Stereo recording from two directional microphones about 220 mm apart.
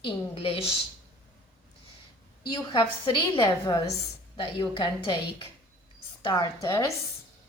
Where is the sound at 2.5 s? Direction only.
20° left (ahead or behind).